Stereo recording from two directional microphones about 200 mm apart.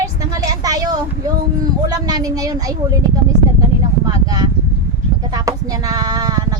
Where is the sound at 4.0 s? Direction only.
20° right (ahead or behind).